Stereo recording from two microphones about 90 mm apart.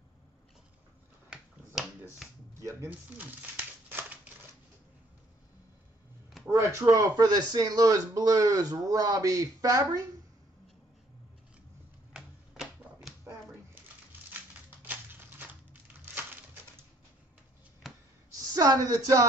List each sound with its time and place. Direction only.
2.2 s a sound: centre (ahead or behind)
2.6 s speech: 35° right (ahead or behind)
2.9 s crumpling: 20° right (ahead or behind)
6.8 s speech: 40° right (ahead or behind)
12.1 s typewriter: 5° right (ahead or behind)
14.8 s crushing: 20° right (ahead or behind)
17.8 s a sound: centre (ahead or behind)
18.5 s speech: 45° right (ahead or behind)